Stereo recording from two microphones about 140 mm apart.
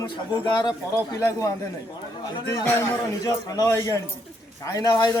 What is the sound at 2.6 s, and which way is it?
Speech, 15° left (ahead or behind).